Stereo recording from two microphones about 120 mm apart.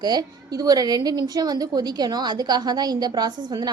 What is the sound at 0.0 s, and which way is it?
A woman's voice, 35° right (ahead or behind).